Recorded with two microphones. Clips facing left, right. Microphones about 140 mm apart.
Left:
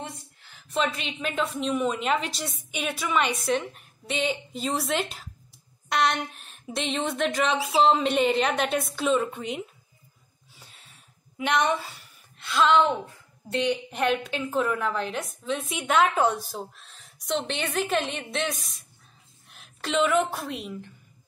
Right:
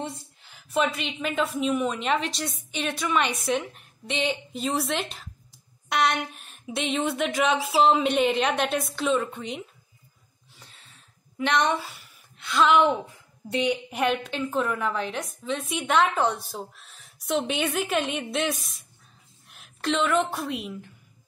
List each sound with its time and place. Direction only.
0.0 s a sound: 20° right (ahead or behind)
0.7 s a woman's voice: centre (ahead or behind)
11.3 s a woman's voice: 5° left (ahead or behind)
13.5 s a woman's voice: 10° right (ahead or behind)